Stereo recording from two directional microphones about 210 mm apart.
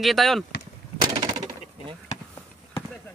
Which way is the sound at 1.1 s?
20° right (ahead or behind).